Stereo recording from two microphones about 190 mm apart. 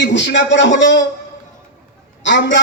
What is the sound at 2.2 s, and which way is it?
Speech, 70° left (ahead or behind).